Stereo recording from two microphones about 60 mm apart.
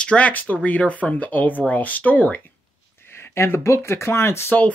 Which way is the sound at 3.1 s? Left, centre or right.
Left.